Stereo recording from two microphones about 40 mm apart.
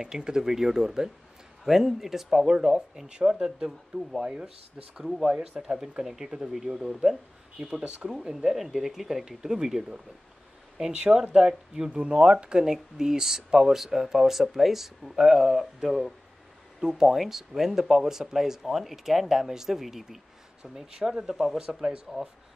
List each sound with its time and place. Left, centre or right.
0.0 s speech: centre
4.2 s speech: right
21.3 s speech: centre
21.5 s speech: right